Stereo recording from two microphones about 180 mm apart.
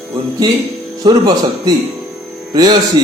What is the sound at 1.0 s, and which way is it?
A man's voice, 25° right (ahead or behind).